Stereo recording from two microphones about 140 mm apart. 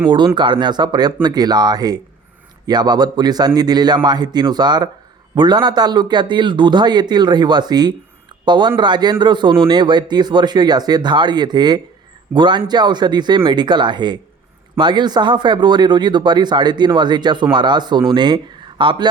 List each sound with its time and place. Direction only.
0.0 s a man's voice: 35° right (ahead or behind)